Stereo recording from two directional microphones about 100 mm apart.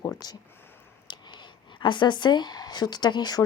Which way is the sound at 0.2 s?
40° left (ahead or behind).